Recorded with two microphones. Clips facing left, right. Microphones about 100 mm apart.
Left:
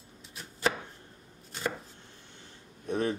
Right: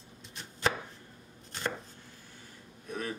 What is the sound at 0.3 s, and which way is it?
Chopping, 5° left (ahead or behind).